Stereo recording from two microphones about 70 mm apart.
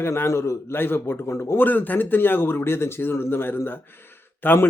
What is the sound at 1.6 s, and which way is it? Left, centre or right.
Speech, left.